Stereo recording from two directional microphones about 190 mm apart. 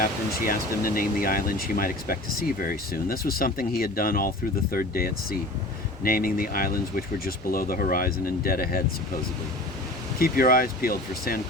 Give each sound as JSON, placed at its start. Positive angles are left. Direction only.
{"t": 0.0, "sound": "speech", "side_deg": 50}
{"t": 10.2, "sound": "speech", "side_deg": 50}